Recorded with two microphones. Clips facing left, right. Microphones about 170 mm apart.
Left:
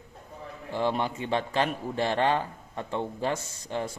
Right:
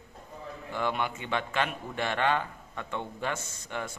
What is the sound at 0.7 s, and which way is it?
A man's voice, 30° left (ahead or behind).